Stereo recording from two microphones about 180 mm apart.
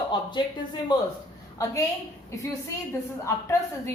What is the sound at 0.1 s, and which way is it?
Speech, 25° left (ahead or behind).